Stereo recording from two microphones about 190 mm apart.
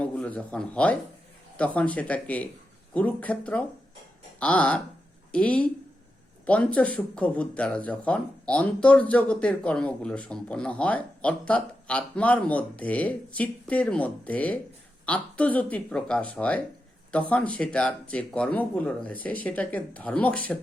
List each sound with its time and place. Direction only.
0.0 s speech: 5° left (ahead or behind)